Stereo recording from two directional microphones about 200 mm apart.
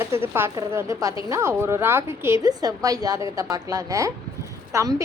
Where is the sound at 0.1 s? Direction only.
10° right (ahead or behind).